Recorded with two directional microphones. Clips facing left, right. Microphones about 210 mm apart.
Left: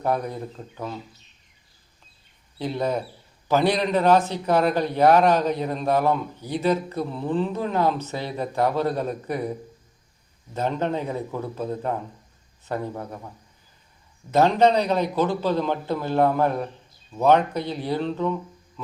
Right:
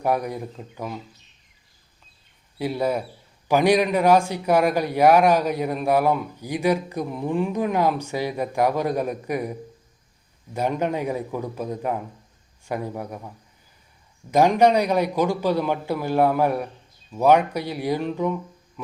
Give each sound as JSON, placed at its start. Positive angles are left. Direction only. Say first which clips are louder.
{"t": 0.0, "sound": "a man's voice", "louder": "right 1 dB", "side_deg": -10}
{"t": 2.6, "sound": "a man's voice", "louder": "right 2 dB", "side_deg": -10}
{"t": 10.5, "sound": "a man's voice", "louder": "right 1 dB", "side_deg": -10}
{"t": 14.3, "sound": "a man's voice", "louder": "right 1 dB", "side_deg": -15}